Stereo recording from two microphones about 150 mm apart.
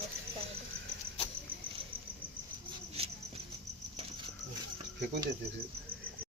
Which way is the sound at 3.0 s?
40° right (ahead or behind).